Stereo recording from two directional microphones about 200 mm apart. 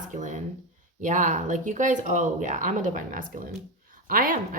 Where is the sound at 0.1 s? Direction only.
40° right (ahead or behind).